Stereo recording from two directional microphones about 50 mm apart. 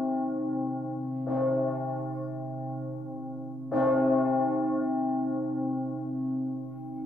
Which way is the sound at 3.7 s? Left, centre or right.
Right.